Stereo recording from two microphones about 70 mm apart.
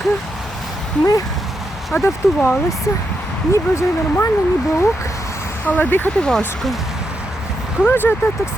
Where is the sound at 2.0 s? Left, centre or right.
Left.